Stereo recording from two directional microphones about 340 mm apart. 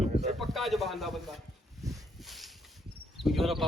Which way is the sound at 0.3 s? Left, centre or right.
Centre.